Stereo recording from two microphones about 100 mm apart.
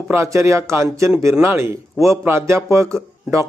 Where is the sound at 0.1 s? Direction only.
30° right (ahead or behind).